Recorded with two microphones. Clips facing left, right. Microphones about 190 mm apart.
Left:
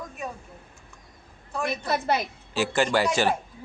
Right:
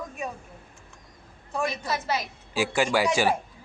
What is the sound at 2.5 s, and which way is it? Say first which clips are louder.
Speech: left 1 dB; 10° right (ahead or behind).